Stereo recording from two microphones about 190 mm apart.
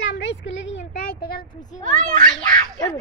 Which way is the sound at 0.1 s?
75° left (ahead or behind).